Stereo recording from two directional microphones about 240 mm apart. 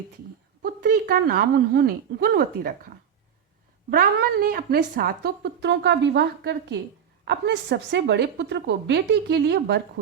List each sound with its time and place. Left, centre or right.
0.6 s a woman's voice: right
3.8 s speech: right